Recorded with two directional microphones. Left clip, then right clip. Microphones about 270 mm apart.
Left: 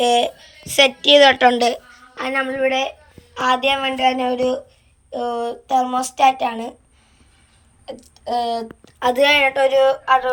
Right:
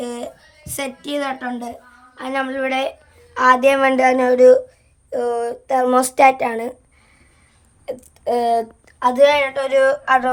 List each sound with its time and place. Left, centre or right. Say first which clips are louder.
0.0 s a woman's voice: left 12 dB; centre
1.2 s a woman's voice: left 13 dB; centre
2.2 s a woman's voice: left 2 dB; centre; by 6.7 s right
7.9 s speech: right 4 dB; centre
9.0 s a woman's voice: right 1 dB; centre